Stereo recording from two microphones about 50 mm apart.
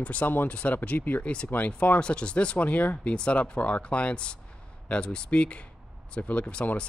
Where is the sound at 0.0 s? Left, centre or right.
Left.